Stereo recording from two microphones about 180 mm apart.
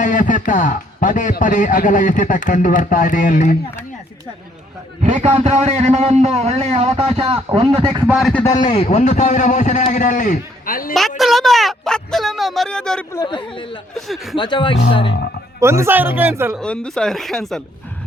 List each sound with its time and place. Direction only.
0.0 s speech: 45° left (ahead or behind)
5.0 s a man's voice: 35° right (ahead or behind)
8.0 s speech: 5° right (ahead or behind)
8.3 s a man's voice: 10° left (ahead or behind)
8.7 s a man's voice: 35° left (ahead or behind); by 10.9 s 50° left (ahead or behind)
11.2 s speech: centre (ahead or behind)
13.2 s speech: 25° left (ahead or behind)
13.9 s speech: centre (ahead or behind)
14.3 s speech: 25° left (ahead or behind)
15.6 s speech: 15° right (ahead or behind)
16.6 s speech: 5° left (ahead or behind)